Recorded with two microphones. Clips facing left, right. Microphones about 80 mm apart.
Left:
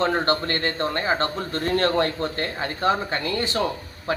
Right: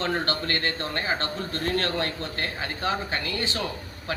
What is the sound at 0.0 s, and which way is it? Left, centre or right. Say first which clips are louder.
Speech: left 5 dB; left.